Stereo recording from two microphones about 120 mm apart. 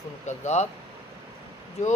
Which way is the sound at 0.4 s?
70° left (ahead or behind).